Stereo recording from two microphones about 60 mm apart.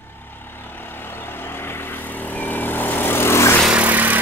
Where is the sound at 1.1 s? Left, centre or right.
Left.